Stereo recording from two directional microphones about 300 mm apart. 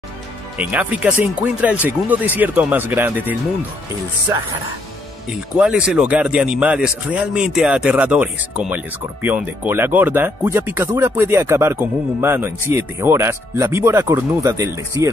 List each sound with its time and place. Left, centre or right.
0.6 s speech: centre
5.6 s speech: centre